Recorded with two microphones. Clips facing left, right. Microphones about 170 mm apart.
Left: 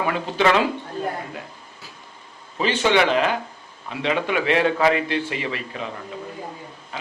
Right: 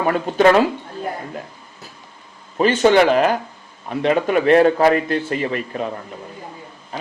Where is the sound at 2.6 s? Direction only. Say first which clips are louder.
Right 6 dB; 45° right (ahead or behind).